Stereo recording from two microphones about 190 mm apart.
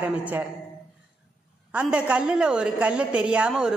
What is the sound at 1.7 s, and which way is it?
A woman's voice, 5° right (ahead or behind).